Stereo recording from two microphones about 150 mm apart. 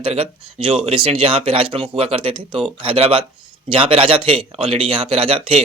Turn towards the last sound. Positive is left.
turn(degrees=-40)  # may be behind; listen again after turning